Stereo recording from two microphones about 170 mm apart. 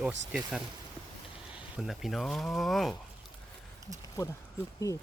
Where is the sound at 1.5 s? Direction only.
Centre (ahead or behind).